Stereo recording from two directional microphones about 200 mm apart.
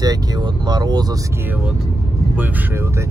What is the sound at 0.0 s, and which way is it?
Speech, 20° right (ahead or behind).